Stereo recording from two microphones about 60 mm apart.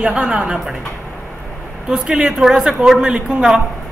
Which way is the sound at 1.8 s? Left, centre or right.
Centre.